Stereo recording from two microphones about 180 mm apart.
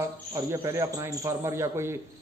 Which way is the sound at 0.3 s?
15° right (ahead or behind).